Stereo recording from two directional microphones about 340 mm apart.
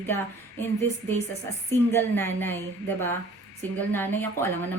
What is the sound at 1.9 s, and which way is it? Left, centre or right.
A woman's voice, centre.